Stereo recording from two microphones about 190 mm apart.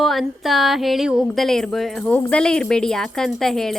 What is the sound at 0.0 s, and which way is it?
Speech, centre (ahead or behind).